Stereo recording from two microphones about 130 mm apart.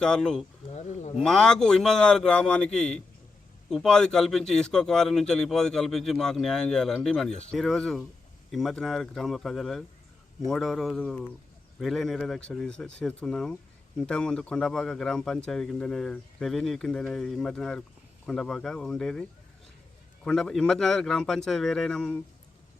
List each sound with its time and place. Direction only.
0.0 s speech: 5° left (ahead or behind)
0.7 s speech: 60° left (ahead or behind)
1.2 s speech: 5° left (ahead or behind)